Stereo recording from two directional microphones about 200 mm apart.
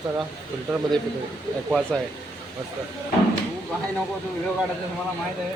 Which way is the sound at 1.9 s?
5° left (ahead or behind).